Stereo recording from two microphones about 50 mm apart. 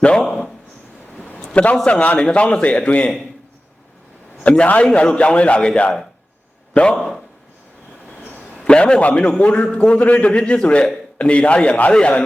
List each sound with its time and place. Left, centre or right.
0.2 s speech: centre
1.5 s a man's voice: left
4.4 s a man's voice: left
8.5 s a sound: centre
9.0 s a man's voice: left